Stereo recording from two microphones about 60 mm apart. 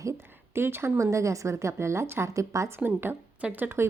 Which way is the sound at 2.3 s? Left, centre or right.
Right.